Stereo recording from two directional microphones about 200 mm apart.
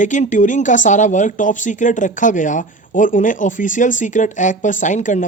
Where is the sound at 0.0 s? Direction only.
40° left (ahead or behind).